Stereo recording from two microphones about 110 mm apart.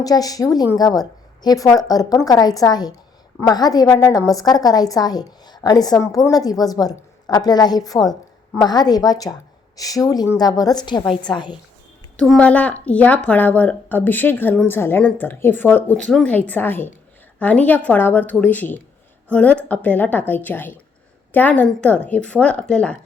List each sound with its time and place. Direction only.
0.0 s a woman's voice: 35° left (ahead or behind)
12.1 s speech: 5° left (ahead or behind)